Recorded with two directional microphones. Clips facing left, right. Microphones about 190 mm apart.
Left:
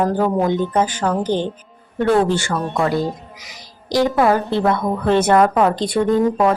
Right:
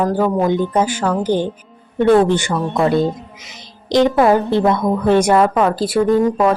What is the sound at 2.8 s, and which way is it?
Speech, 25° right (ahead or behind).